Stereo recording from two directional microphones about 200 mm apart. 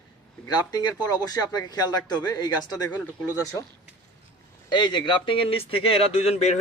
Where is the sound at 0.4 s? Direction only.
20° left (ahead or behind).